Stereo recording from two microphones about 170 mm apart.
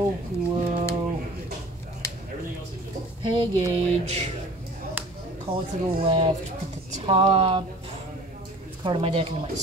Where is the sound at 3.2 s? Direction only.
25° right (ahead or behind).